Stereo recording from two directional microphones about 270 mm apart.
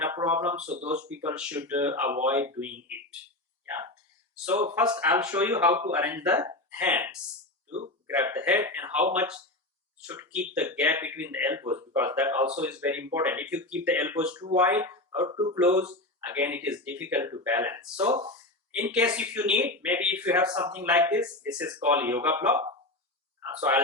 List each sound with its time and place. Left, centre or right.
0.0 s a sound: centre
0.6 s speech: right
1.0 s speech: centre
4.4 s speech: centre
18.8 s speech: centre